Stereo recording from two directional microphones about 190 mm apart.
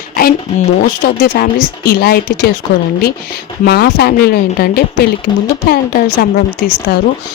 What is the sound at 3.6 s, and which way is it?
Speech, 55° left (ahead or behind).